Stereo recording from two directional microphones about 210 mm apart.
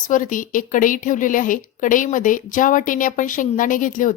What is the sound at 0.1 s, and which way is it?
Speech, 40° left (ahead or behind).